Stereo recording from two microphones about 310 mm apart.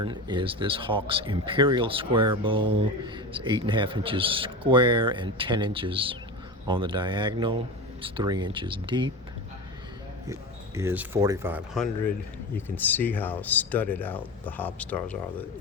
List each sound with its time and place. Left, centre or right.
0.0 s speech: centre
10.8 s speech: centre